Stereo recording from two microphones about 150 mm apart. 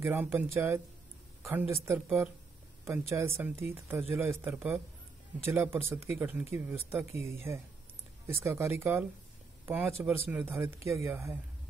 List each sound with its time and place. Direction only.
0.0 s speech: 10° right (ahead or behind)